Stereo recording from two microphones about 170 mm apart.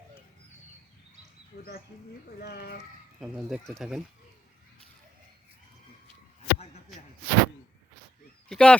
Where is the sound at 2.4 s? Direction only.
70° left (ahead or behind).